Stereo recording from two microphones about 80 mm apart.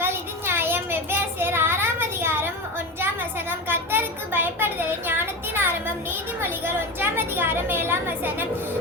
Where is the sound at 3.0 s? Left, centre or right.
Right.